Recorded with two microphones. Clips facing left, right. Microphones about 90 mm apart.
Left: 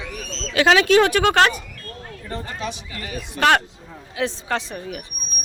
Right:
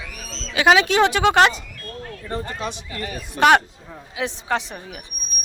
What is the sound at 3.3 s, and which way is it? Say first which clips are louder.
A woman's voice: right 3 dB; 15° right (ahead or behind).